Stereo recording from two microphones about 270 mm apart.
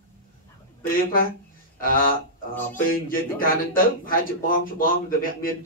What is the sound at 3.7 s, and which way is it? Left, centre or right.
Speech, left.